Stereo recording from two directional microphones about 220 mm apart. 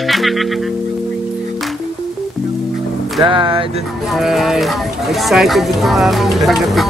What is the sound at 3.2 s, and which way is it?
Music, 20° right (ahead or behind).